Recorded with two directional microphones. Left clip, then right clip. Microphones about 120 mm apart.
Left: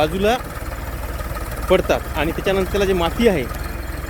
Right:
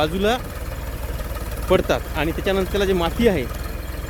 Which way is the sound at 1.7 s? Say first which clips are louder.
Left 2 dB; 15° right (ahead or behind).